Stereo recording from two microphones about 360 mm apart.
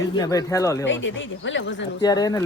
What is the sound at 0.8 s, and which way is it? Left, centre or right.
Speech, left.